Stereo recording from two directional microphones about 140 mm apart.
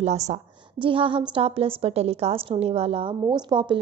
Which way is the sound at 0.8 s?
40° right (ahead or behind).